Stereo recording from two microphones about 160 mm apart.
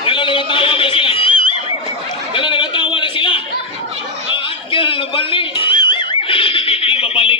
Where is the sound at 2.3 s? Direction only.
30° left (ahead or behind).